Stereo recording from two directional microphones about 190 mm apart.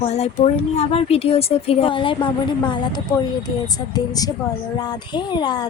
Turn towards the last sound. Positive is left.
turn(degrees=25)  # may be behind; listen again after turning